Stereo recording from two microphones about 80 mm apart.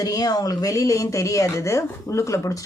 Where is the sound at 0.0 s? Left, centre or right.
Left.